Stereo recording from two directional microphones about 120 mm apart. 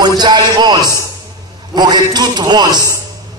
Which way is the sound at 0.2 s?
35° right (ahead or behind).